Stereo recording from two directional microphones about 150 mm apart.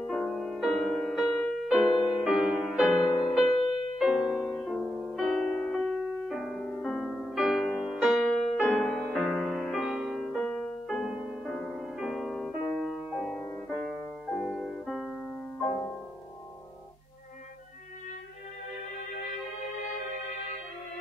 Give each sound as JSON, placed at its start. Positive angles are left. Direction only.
{"t": 0.0, "sound": "music", "side_deg": 5}
{"t": 3.1, "sound": "music", "side_deg": 30}
{"t": 4.0, "sound": "music", "side_deg": -5}
{"t": 11.1, "sound": "music", "side_deg": -5}